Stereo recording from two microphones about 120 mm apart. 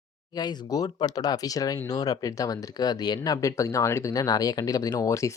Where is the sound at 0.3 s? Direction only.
35° left (ahead or behind).